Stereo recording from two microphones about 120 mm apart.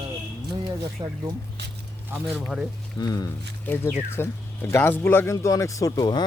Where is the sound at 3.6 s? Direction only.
15° left (ahead or behind).